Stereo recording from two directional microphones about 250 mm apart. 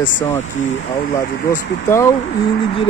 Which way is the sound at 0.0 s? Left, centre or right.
Left.